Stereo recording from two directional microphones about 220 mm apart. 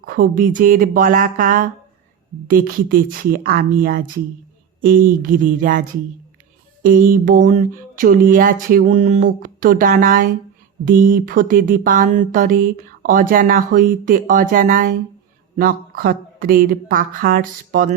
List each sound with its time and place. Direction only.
0.0 s speech: 40° right (ahead or behind)